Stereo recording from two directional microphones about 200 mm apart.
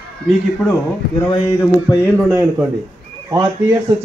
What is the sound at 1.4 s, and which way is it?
Speech, 15° left (ahead or behind).